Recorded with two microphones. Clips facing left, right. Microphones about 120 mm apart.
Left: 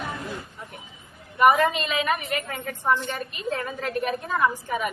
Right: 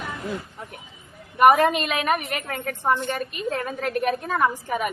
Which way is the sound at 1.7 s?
60° right (ahead or behind).